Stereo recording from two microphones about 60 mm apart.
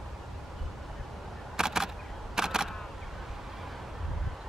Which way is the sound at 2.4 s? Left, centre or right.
Centre.